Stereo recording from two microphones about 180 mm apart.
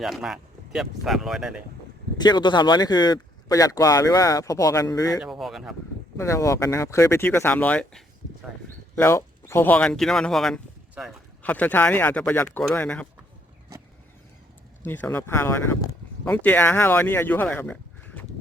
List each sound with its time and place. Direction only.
0.0 s speech: centre (ahead or behind)
2.1 s speech: 25° left (ahead or behind)
5.2 s speech: centre (ahead or behind)
6.1 s speech: 15° left (ahead or behind)
14.8 s speech: 10° left (ahead or behind)